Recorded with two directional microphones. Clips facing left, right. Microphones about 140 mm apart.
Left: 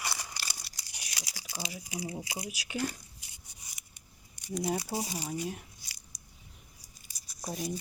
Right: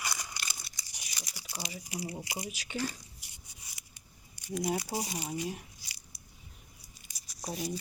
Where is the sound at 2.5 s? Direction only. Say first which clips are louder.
Left 2 dB; 10° left (ahead or behind).